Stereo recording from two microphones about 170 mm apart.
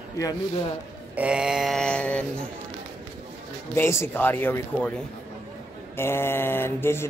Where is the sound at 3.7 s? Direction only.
15° left (ahead or behind).